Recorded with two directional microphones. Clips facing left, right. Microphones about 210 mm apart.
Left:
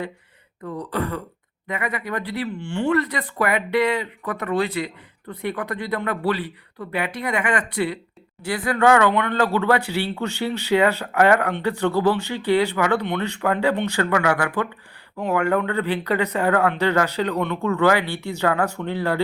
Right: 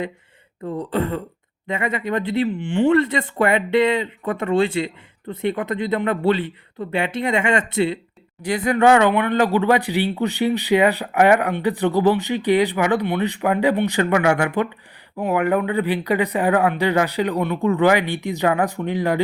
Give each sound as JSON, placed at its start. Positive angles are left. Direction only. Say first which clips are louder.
{"t": 0.6, "sound": "speech", "louder": "right 4 dB", "side_deg": -25}